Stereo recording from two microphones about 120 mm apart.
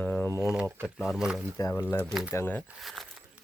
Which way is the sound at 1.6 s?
30° left (ahead or behind).